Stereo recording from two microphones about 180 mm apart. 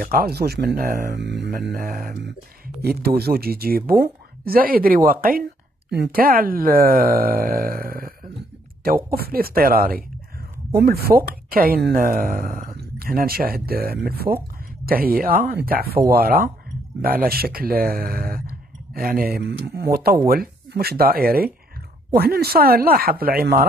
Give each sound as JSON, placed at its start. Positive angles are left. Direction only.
{"t": 0.0, "sound": "speech", "side_deg": -60}
{"t": 1.7, "sound": "speech", "side_deg": -55}